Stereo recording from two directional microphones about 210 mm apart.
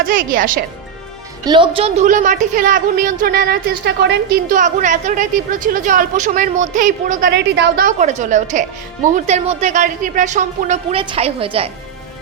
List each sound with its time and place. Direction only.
0.1 s a woman's voice: 40° right (ahead or behind)
1.5 s a woman's voice: 25° right (ahead or behind); by 7.9 s 55° right (ahead or behind)
7.9 s a woman's voice: 35° right (ahead or behind)